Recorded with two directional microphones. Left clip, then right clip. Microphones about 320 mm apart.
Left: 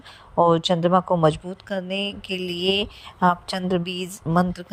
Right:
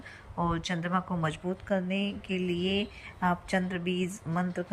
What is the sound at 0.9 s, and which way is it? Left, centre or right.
Speech, left.